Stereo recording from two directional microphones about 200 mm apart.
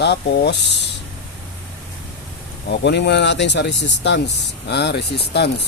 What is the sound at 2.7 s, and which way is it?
Speech, 60° left (ahead or behind).